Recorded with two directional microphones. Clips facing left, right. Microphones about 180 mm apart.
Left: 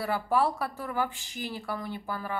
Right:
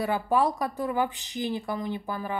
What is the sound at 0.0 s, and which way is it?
Speech, 20° right (ahead or behind).